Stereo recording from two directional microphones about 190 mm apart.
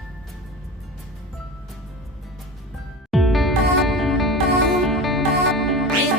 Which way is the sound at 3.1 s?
Centre (ahead or behind).